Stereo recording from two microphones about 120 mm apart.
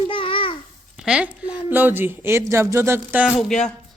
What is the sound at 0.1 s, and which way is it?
Babbling, 45° left (ahead or behind).